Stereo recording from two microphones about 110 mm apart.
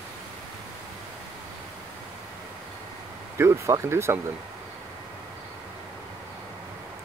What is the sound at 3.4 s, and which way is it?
Speech, 25° right (ahead or behind).